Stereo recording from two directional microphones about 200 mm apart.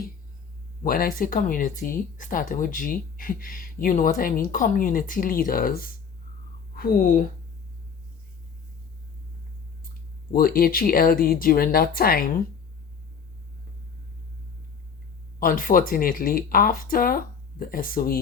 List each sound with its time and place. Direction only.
0.9 s speech: 45° left (ahead or behind)
10.3 s speech: 45° left (ahead or behind)
15.4 s speech: 45° left (ahead or behind)